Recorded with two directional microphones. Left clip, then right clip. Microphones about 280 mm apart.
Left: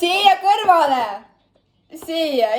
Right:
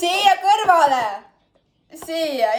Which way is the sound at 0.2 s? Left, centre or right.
Centre.